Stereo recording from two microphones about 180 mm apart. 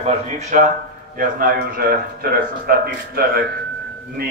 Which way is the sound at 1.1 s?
50° right (ahead or behind).